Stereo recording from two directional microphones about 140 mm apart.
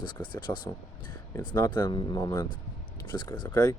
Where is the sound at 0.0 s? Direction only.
30° left (ahead or behind).